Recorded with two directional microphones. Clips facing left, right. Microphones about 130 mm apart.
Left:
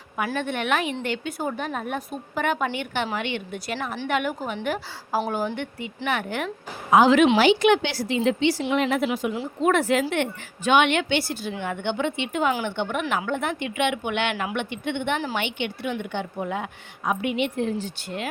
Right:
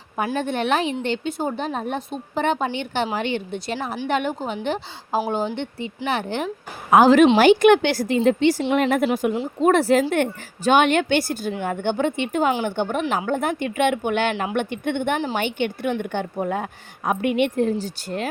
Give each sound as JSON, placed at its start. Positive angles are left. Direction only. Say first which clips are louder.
{"t": 0.3, "sound": "a woman's voice", "louder": "right 4 dB", "side_deg": -35}
{"t": 6.9, "sound": "speech", "louder": "right 3 dB", "side_deg": -45}
{"t": 9.6, "sound": "a woman's voice", "louder": "right 4 dB", "side_deg": -35}